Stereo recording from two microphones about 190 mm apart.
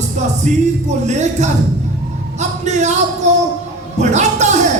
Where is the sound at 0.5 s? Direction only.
40° right (ahead or behind).